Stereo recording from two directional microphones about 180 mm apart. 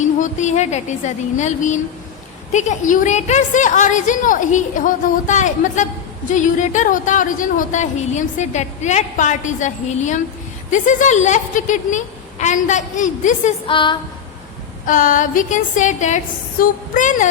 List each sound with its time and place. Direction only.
0.0 s a woman's voice: 40° left (ahead or behind)
13.7 s a sound: 25° left (ahead or behind)
14.8 s speech: 45° left (ahead or behind)